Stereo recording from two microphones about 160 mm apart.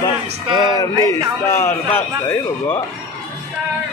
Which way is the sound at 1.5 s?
15° left (ahead or behind).